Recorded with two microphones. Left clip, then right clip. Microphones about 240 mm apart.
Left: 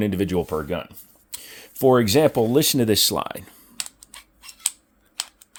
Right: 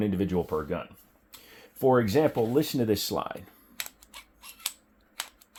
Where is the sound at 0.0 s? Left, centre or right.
Left.